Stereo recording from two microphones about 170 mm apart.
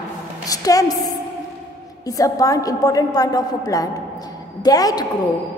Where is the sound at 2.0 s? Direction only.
20° left (ahead or behind).